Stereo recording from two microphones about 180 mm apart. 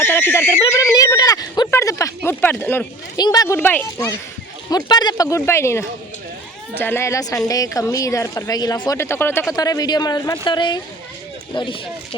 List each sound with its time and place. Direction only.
0.0 s a sound: 10° left (ahead or behind)
3.2 s speech: 20° left (ahead or behind)
4.7 s speech: 25° left (ahead or behind)